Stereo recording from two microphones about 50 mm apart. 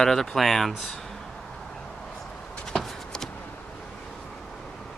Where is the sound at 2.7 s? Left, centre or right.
Centre.